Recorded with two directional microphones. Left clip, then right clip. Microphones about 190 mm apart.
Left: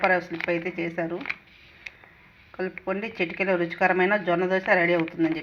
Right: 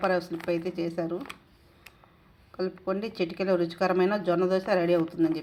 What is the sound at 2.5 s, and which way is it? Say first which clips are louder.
Speech: left 1 dB; 5° right (ahead or behind).